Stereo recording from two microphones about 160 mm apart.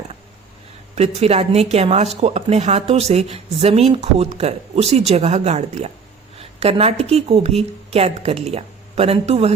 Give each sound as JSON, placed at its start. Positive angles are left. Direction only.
{"t": 0.9, "sound": "speech", "side_deg": -40}